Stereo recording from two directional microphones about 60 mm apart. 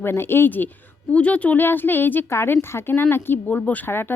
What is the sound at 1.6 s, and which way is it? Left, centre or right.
Speech, left.